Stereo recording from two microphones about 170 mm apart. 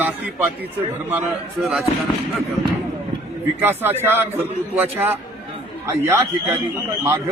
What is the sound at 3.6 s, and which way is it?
A man's voice, 10° right (ahead or behind).